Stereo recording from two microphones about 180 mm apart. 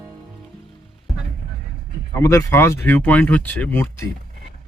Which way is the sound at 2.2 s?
15° left (ahead or behind).